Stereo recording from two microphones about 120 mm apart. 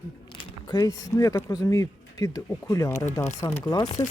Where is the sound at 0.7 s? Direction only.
30° left (ahead or behind).